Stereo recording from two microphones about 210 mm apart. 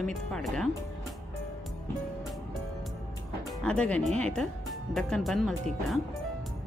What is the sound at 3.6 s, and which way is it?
Speech, 5° left (ahead or behind).